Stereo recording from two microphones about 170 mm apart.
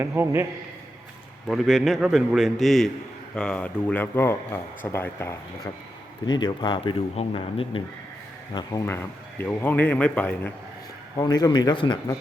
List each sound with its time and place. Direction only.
0.0 s a man's voice: 15° right (ahead or behind)
1.5 s a man's voice: centre (ahead or behind); by 5.3 s 15° left (ahead or behind)
6.2 s speech: 25° left (ahead or behind)
8.5 s a man's voice: 20° left (ahead or behind)
11.2 s speech: 25° left (ahead or behind)